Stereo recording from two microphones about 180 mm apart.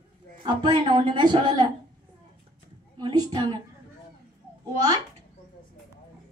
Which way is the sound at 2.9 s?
25° right (ahead or behind).